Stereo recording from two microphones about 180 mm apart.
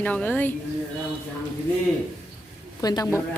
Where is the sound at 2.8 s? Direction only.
20° left (ahead or behind).